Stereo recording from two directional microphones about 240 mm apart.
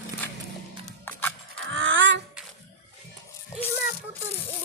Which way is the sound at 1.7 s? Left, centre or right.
Right.